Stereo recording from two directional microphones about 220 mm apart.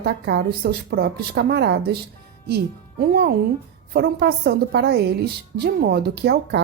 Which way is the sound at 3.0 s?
45° right (ahead or behind).